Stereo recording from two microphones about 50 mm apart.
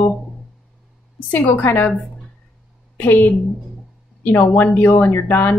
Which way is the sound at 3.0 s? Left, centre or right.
Left.